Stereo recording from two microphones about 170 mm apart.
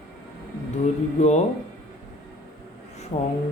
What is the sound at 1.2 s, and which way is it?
Speech, 40° left (ahead or behind).